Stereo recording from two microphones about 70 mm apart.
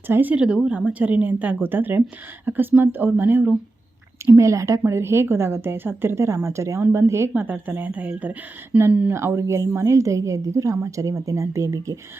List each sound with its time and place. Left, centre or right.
0.1 s speech: right
4.3 s a woman's voice: right
7.4 s speech: right
9.1 s a woman's voice: right